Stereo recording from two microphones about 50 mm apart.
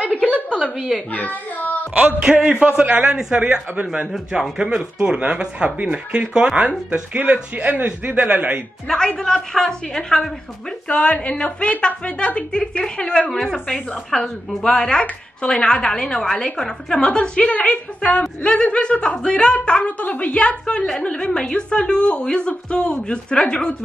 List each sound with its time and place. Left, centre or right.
0.0 s a sound: left
0.7 s a woman's voice: centre
1.1 s a child's voice: left
2.4 s speech: centre
8.8 s a woman's voice: centre
10.9 s a woman's voice: left